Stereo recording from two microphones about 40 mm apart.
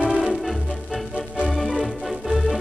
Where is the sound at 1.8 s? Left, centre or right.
Centre.